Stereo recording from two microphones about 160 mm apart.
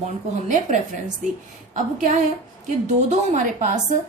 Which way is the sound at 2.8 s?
50° right (ahead or behind).